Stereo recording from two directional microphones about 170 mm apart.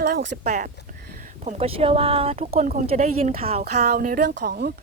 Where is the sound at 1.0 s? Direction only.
60° right (ahead or behind).